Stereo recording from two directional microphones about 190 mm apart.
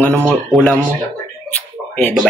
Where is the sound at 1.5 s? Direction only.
5° left (ahead or behind).